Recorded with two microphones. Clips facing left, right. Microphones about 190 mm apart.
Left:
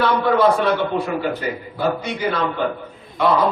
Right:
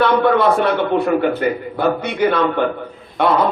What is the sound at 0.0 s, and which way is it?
A man's voice, 60° right (ahead or behind).